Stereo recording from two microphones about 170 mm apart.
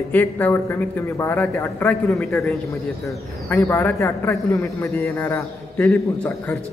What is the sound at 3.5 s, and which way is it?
A man's voice, 15° left (ahead or behind).